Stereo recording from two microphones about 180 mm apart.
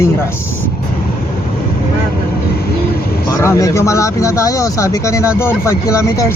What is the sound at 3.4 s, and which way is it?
Speech, 15° left (ahead or behind).